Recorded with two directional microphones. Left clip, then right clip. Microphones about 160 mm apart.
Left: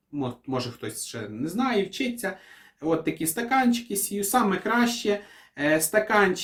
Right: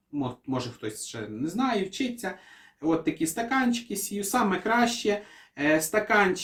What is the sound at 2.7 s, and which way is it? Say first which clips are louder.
Speech: even; 25° left (ahead or behind).